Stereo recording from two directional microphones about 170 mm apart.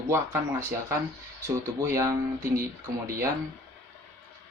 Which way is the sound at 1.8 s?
15° right (ahead or behind).